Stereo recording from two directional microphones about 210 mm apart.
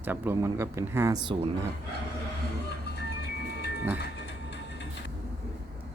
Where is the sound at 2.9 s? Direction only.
50° left (ahead or behind).